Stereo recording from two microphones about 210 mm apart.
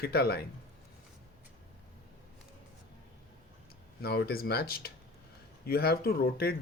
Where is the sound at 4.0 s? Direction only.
50° left (ahead or behind).